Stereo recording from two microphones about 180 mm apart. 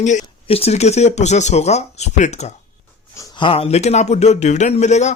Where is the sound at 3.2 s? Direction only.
25° left (ahead or behind).